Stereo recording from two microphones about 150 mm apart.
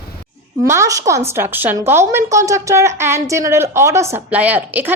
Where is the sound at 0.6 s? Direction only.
20° right (ahead or behind).